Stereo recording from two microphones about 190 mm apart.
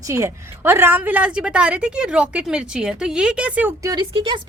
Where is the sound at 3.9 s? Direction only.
25° right (ahead or behind).